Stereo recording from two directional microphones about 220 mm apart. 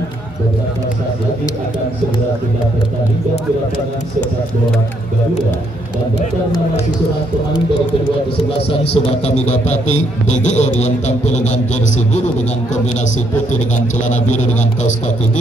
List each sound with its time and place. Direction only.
8.6 s a man's voice: 30° left (ahead or behind)
14.0 s a man's voice: 35° left (ahead or behind)